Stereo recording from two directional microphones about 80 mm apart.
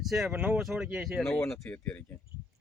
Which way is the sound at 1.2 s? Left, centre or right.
Centre.